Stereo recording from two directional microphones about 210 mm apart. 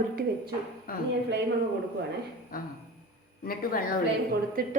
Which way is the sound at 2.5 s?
45° left (ahead or behind).